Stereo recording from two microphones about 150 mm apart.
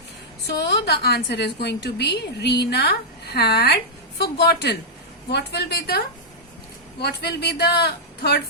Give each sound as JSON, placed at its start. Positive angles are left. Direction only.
{"t": 0.4, "sound": "a woman's voice", "side_deg": 90}
{"t": 7.0, "sound": "a woman's voice", "side_deg": 90}